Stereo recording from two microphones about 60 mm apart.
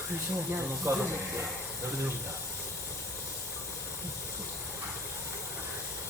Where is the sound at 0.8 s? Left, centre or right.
Right.